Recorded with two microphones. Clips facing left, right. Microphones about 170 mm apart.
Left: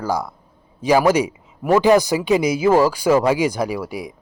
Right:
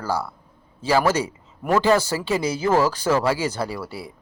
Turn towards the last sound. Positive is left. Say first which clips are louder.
# left 5 dB
turn(degrees=15)  # may be behind; listen again after turning